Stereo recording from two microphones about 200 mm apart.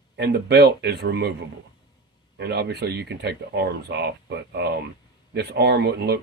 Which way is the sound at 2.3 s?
55° right (ahead or behind).